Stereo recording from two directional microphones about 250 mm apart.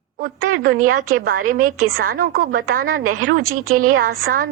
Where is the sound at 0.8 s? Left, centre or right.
Right.